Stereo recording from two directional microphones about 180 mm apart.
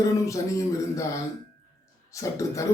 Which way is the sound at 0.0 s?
20° left (ahead or behind).